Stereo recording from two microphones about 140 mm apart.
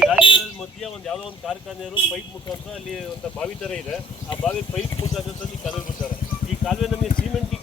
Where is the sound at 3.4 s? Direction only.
5° left (ahead or behind).